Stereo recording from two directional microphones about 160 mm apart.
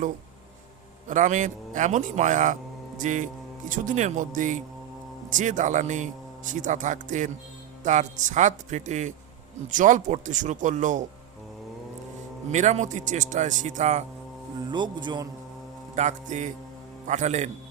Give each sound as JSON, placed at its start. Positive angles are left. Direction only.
{"t": 1.0, "sound": "a man's voice", "side_deg": -50}
{"t": 12.5, "sound": "a man's voice", "side_deg": -45}
{"t": 14.7, "sound": "a man's voice", "side_deg": -30}
{"t": 16.0, "sound": "a man's voice", "side_deg": -50}